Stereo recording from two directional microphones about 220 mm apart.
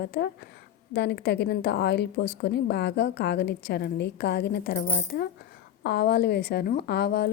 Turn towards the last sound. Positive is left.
turn(degrees=45)  # may be behind; listen again after turning